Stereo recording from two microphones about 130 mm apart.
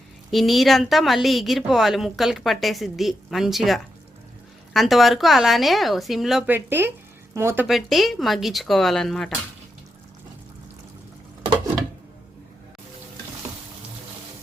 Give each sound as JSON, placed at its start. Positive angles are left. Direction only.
{"t": 0.3, "sound": "a woman's voice", "side_deg": 0}
{"t": 6.5, "sound": "speech", "side_deg": -15}
{"t": 7.7, "sound": "a woman's voice", "side_deg": 0}